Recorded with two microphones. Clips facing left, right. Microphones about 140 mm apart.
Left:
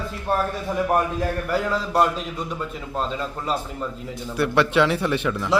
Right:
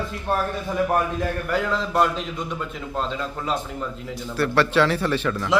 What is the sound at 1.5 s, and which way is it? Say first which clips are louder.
A man's voice: even; 5° left (ahead or behind).